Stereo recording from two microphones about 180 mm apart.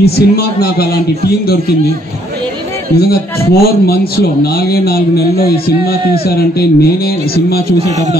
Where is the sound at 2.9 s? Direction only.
60° left (ahead or behind).